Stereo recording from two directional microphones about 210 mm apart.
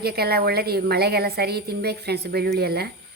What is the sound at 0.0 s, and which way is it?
A woman's voice, 50° right (ahead or behind).